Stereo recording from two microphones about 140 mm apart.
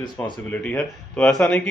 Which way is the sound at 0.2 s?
10° left (ahead or behind).